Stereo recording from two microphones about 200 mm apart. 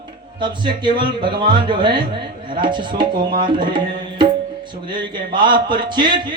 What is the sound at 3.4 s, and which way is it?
Tabla, 25° right (ahead or behind).